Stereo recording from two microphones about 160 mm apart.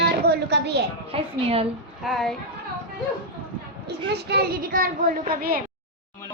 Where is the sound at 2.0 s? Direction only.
Centre (ahead or behind).